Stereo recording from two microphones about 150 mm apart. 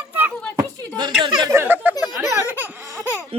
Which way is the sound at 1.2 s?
25° right (ahead or behind).